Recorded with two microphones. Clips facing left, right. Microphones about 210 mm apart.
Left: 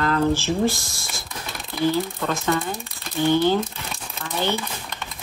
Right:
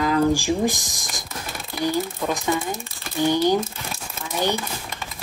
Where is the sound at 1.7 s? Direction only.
15° right (ahead or behind).